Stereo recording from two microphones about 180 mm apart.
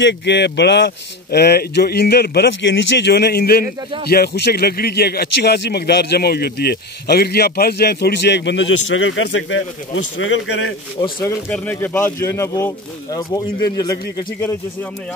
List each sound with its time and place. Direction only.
0.0 s a man's voice: 75° left (ahead or behind); by 10.7 s 90° left
11.0 s speech: 15° left (ahead or behind)